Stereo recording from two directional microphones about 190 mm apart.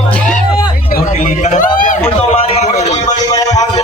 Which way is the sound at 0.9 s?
40° left (ahead or behind).